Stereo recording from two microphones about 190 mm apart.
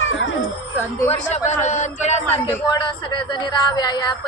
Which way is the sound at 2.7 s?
25° left (ahead or behind).